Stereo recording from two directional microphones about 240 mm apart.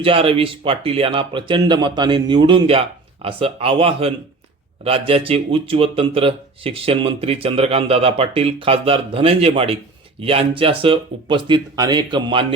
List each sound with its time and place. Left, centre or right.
0.0 s a man's voice: right